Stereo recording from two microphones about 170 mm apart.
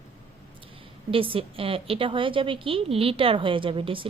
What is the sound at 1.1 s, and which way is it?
A woman's voice, 30° right (ahead or behind).